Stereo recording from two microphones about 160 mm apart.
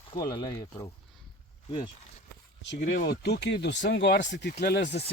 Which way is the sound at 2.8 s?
55° left (ahead or behind).